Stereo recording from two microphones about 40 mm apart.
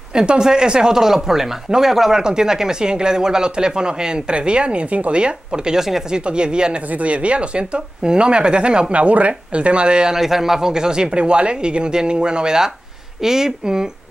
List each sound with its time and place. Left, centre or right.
0.1 s speech: centre
6.9 s speech: right
10.1 s speech: centre